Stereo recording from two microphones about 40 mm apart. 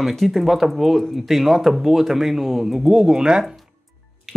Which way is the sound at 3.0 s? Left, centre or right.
Right.